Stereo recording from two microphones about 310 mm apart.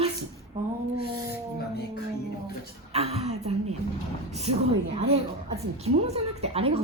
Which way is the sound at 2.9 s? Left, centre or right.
Centre.